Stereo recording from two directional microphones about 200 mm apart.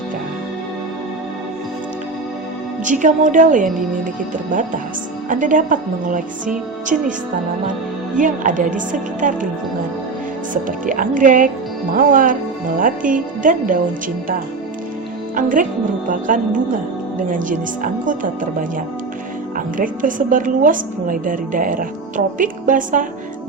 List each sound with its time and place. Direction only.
2.8 s speech: 40° right (ahead or behind)
5.3 s speech: 40° right (ahead or behind)
8.1 s speech: 40° right (ahead or behind)
10.5 s a woman's voice: 40° right (ahead or behind)
15.4 s a woman's voice: 40° right (ahead or behind)
19.5 s a woman's voice: 40° right (ahead or behind)